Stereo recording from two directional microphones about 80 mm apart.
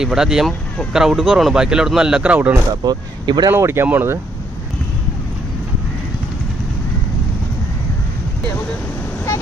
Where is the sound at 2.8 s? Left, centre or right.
Right.